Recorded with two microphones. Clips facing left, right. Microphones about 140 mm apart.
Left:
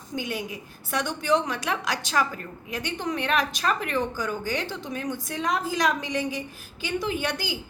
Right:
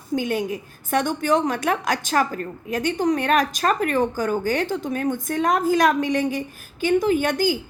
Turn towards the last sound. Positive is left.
turn(degrees=-45)  # may be behind; listen again after turning